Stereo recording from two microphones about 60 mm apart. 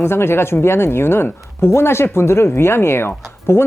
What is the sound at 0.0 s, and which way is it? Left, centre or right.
Speech, left.